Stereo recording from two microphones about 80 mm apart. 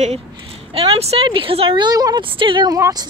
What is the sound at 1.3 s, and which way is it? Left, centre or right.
Speech, right.